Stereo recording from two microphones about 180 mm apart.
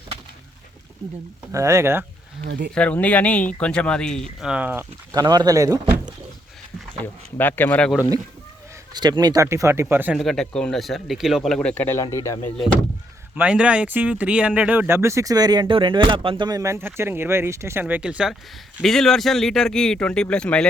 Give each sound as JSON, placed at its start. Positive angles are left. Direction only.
{"t": 1.5, "sound": "speech", "side_deg": -15}
{"t": 2.5, "sound": "speech", "side_deg": -70}
{"t": 2.7, "sound": "speech", "side_deg": 5}
{"t": 5.2, "sound": "speech", "side_deg": -25}
{"t": 6.9, "sound": "speech", "side_deg": 10}
{"t": 8.9, "sound": "speech", "side_deg": -25}
{"t": 13.3, "sound": "speech", "side_deg": -5}